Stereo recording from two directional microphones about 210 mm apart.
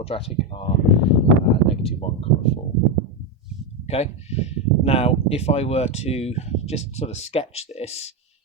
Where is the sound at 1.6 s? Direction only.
30° left (ahead or behind).